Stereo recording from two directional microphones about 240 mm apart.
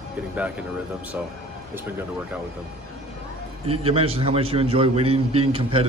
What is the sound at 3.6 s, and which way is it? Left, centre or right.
A man's voice, right.